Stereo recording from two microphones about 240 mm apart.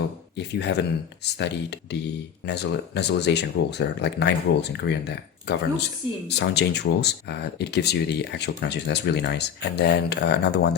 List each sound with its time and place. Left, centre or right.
0.3 s speech: left